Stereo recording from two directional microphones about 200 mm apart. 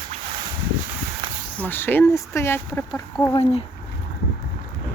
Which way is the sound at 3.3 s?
30° left (ahead or behind).